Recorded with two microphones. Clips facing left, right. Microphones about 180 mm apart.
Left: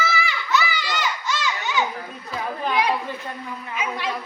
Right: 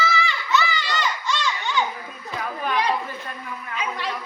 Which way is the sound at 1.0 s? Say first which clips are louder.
Right 1 dB; 5° left (ahead or behind).